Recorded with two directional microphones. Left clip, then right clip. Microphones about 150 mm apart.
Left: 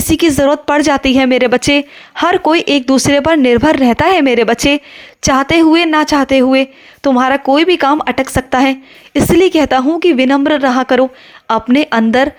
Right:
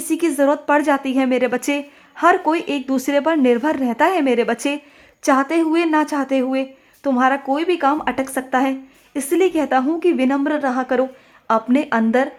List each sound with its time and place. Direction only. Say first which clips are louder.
0.1 s a woman's voice: left 7 dB; 30° left (ahead or behind)